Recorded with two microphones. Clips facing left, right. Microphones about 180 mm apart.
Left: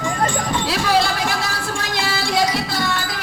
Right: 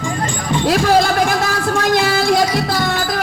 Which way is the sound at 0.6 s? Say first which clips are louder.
Right 7 dB; 45° right (ahead or behind).